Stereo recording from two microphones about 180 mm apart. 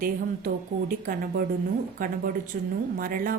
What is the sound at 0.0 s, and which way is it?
Speech, 50° right (ahead or behind).